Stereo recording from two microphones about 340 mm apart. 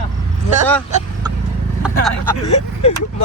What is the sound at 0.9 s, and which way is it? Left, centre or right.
Vehicle, centre.